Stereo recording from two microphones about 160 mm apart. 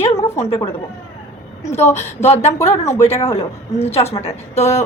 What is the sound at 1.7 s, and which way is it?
Speech, 15° left (ahead or behind).